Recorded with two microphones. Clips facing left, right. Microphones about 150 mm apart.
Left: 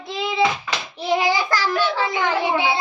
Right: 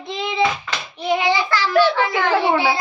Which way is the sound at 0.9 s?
35° left (ahead or behind).